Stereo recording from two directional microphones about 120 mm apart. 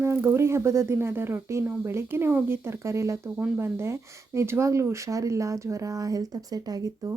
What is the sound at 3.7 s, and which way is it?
Speech, 20° right (ahead or behind).